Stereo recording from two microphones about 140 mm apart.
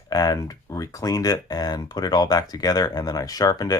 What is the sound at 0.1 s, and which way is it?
Speech, 25° left (ahead or behind).